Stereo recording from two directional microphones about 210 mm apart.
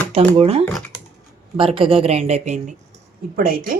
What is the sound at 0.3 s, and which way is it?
Speech, 30° right (ahead or behind).